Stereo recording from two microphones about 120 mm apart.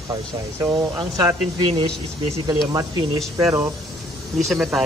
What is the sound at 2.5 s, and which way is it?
Speech, 30° right (ahead or behind).